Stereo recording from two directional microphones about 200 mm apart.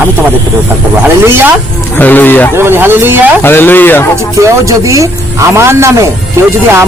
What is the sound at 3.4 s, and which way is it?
Speech, 10° left (ahead or behind).